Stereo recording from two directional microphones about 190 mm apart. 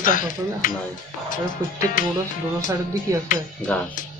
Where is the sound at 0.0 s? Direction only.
45° left (ahead or behind).